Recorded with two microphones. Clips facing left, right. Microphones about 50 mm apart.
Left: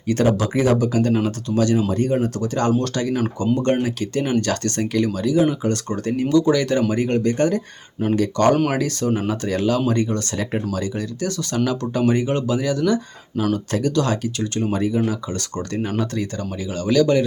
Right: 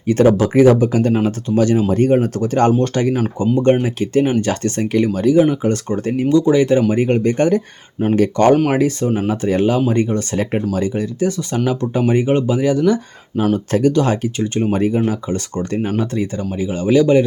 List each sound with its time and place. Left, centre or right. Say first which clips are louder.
0.3 s speech: right 7 dB; right
3.2 s speech: right 3 dB; centre
9.0 s speech: right 3 dB; centre
9.3 s speech: right 5 dB; right